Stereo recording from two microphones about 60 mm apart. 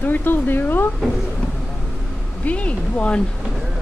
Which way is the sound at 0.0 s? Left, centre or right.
Left.